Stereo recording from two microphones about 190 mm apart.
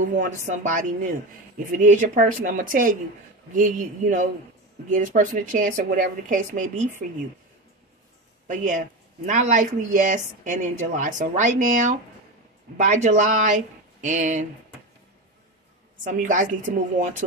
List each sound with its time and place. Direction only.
0.0 s a woman's voice: 45° right (ahead or behind)
8.5 s speech: 40° right (ahead or behind)
16.0 s a woman's voice: 45° right (ahead or behind)